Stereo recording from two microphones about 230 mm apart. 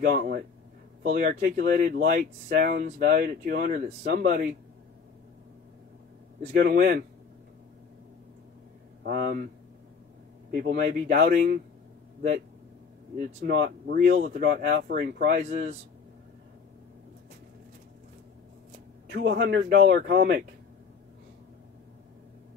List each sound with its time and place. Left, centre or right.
0.1 s a man's voice: right
6.4 s a man's voice: right
9.0 s speech: right
10.5 s speech: right
13.2 s a man's voice: right
19.0 s a man's voice: right